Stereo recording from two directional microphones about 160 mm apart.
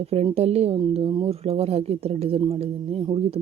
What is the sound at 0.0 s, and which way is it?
Speech, 40° right (ahead or behind).